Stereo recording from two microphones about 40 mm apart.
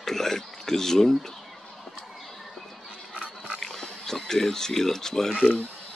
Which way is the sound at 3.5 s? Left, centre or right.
Centre.